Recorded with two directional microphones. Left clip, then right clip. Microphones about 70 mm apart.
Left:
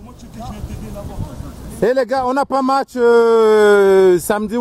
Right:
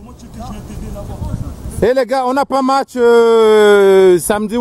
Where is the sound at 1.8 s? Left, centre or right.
Centre.